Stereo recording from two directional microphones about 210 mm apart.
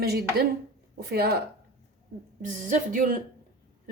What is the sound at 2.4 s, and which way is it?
Speech, 40° right (ahead or behind).